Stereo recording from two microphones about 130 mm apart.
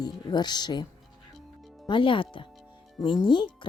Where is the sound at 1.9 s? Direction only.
40° left (ahead or behind).